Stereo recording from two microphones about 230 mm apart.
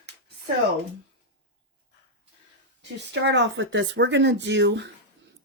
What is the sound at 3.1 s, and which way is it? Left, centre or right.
Speech, right.